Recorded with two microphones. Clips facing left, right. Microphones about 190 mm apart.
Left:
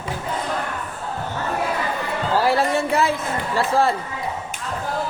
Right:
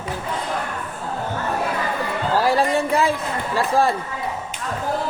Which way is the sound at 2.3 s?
15° right (ahead or behind).